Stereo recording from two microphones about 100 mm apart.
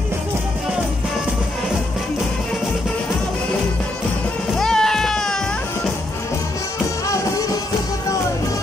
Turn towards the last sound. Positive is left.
turn(degrees=35)  # may be behind; listen again after turning